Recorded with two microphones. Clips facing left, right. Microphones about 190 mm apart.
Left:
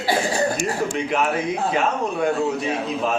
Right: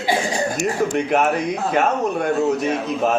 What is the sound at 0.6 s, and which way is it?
Speech, 50° right (ahead or behind).